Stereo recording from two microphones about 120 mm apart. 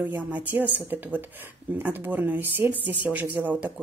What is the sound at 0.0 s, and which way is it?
Speech, 15° right (ahead or behind).